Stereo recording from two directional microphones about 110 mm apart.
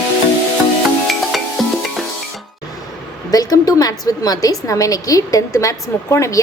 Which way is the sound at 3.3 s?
35° left (ahead or behind).